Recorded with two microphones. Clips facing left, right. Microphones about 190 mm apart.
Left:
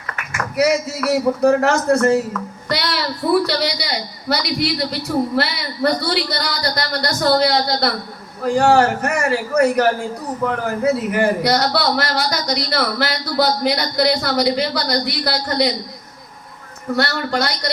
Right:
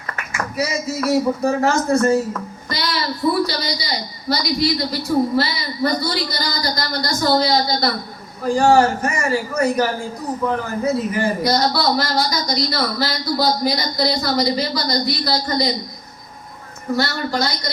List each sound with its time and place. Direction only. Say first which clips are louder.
0.5 s speech: left 6 dB; 70° left (ahead or behind)
2.6 s child singing: left 3 dB; 70° left (ahead or behind)
3.4 s speech: left 3 dB; 70° left (ahead or behind)
16.9 s speech: left 1 dB; 65° left (ahead or behind)